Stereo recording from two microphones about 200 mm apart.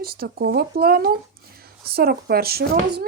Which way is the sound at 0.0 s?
50° right (ahead or behind).